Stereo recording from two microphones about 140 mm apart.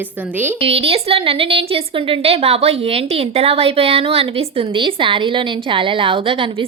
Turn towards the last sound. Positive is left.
turn(degrees=-40)  # may be behind; listen again after turning